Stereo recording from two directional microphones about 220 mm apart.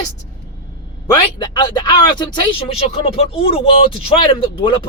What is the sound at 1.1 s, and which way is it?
Speech, 20° left (ahead or behind).